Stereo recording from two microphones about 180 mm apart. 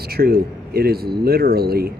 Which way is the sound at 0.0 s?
60° right (ahead or behind).